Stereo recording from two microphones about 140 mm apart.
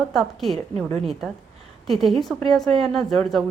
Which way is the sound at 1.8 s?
Centre (ahead or behind).